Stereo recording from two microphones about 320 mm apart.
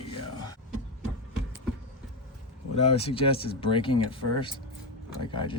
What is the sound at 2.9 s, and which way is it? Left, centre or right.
Speech, centre.